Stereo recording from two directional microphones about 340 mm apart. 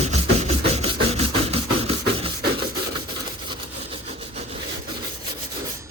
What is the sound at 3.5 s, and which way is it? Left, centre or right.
Sawing, centre.